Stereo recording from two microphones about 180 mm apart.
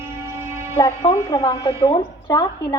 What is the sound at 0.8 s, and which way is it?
A woman's voice, 20° left (ahead or behind).